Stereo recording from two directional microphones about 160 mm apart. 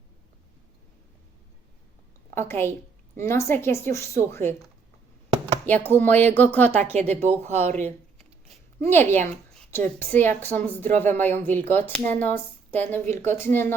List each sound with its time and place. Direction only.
2.3 s speech: 15° left (ahead or behind)
5.6 s speech: 10° left (ahead or behind)
7.1 s speech: 40° right (ahead or behind)
8.8 s speech: 15° left (ahead or behind)